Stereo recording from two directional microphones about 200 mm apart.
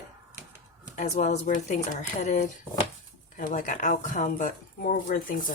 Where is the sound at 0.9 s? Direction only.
35° left (ahead or behind).